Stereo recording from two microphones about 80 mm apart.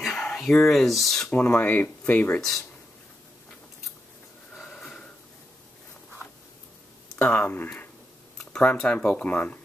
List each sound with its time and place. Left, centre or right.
0.0 s speech: centre
1.3 s speech: centre
4.6 s a sound: centre
7.2 s speech: left
8.4 s speech: centre